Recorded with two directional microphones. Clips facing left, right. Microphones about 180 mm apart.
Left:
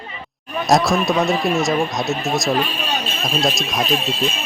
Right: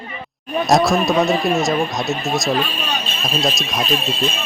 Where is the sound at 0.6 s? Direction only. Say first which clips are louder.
Right 1 dB; centre (ahead or behind).